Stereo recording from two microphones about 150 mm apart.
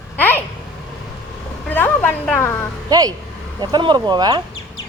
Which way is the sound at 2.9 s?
25° right (ahead or behind).